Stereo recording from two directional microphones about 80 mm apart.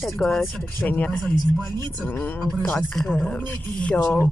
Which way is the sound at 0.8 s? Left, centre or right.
Centre.